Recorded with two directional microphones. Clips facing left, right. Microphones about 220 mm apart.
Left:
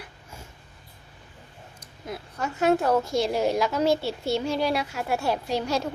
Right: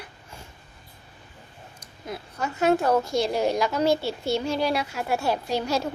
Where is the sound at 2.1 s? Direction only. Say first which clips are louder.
Even; centre (ahead or behind).